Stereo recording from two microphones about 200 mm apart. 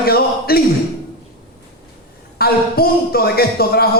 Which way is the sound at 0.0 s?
50° left (ahead or behind).